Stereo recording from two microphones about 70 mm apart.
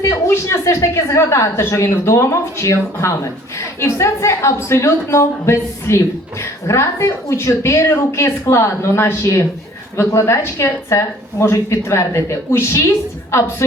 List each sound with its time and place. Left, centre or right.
0.0 s a woman's voice: left